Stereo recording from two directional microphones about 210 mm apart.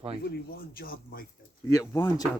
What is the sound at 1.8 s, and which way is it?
Speech, 15° left (ahead or behind).